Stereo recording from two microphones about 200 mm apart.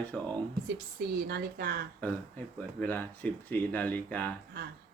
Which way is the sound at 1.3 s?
50° right (ahead or behind).